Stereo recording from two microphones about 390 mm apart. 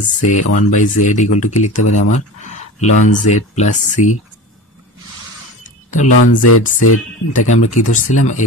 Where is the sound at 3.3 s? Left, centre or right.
Centre.